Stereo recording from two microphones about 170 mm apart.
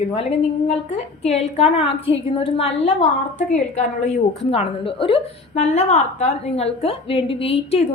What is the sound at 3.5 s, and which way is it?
A woman's voice, 45° left (ahead or behind).